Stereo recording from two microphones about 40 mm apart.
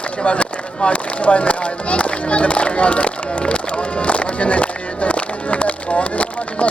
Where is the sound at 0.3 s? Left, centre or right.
Left.